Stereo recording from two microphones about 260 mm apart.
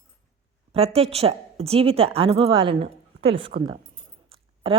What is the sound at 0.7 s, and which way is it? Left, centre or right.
A woman's voice, right.